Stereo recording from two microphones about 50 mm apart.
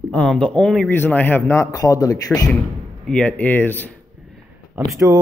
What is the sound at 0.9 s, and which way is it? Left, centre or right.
Speech, left.